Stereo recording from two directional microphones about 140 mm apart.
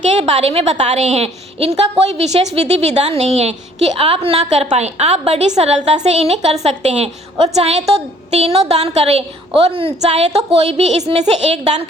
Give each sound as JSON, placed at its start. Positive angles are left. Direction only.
{"t": 0.1, "sound": "a woman's voice", "side_deg": -50}